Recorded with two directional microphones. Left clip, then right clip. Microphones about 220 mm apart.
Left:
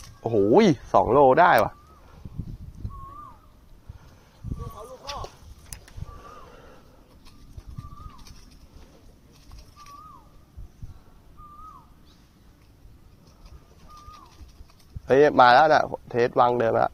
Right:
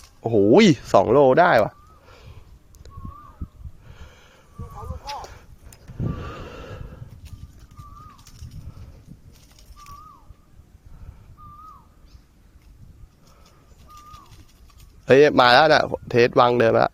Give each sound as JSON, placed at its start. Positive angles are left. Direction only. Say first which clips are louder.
{"t": 0.5, "sound": "speech", "louder": "right 3 dB", "side_deg": -50}
{"t": 4.6, "sound": "a sound", "louder": "right 2 dB", "side_deg": 0}
{"t": 13.9, "sound": "bird", "louder": "right 2 dB", "side_deg": 10}
{"t": 15.0, "sound": "speech", "louder": "right 2 dB", "side_deg": -60}
{"t": 15.9, "sound": "speech", "louder": "right 6 dB", "side_deg": -55}